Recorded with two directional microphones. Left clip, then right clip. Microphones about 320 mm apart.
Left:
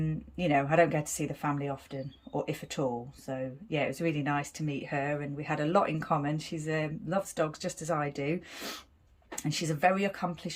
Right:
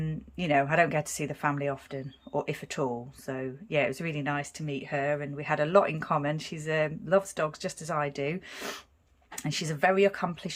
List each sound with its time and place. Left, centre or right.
0.0 s speech: centre